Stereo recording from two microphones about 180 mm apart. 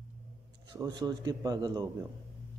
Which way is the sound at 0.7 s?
20° right (ahead or behind).